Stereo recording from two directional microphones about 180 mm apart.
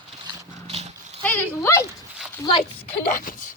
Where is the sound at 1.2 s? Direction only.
10° left (ahead or behind).